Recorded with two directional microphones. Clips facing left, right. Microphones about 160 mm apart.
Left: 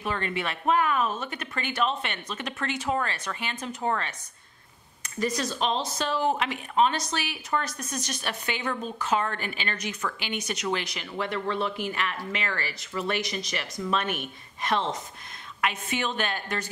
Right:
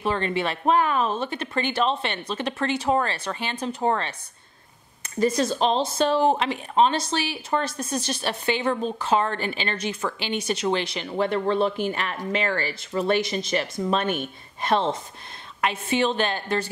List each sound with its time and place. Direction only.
0.0 s speech: 30° right (ahead or behind)